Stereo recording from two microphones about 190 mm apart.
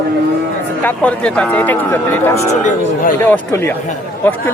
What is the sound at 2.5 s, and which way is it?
Speech, 40° left (ahead or behind).